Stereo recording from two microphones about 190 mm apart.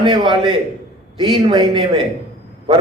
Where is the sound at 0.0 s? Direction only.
25° right (ahead or behind).